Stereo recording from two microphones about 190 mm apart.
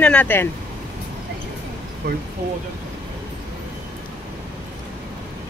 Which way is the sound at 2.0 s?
60° right (ahead or behind).